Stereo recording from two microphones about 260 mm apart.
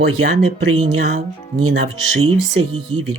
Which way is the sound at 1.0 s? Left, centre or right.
Right.